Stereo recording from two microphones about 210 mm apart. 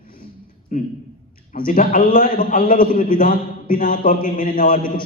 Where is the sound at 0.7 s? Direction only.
40° left (ahead or behind).